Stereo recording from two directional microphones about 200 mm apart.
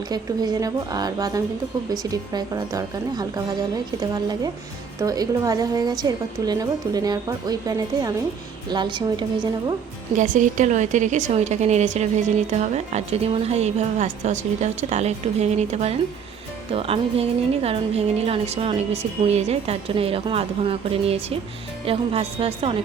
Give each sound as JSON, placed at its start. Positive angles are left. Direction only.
{"t": 0.1, "sound": "a woman's voice", "side_deg": -20}
{"t": 10.2, "sound": "a woman's voice", "side_deg": -40}